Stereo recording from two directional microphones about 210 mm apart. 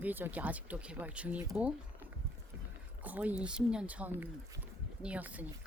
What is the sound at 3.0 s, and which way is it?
Speech, 5° right (ahead or behind).